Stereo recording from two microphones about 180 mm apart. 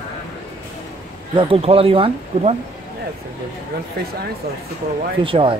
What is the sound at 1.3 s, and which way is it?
Speech, 30° right (ahead or behind).